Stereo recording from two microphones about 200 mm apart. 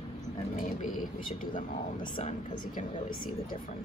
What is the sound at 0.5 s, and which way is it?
A woman's voice, 40° left (ahead or behind).